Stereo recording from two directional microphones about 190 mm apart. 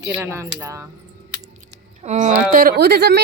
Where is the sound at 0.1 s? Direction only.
15° right (ahead or behind).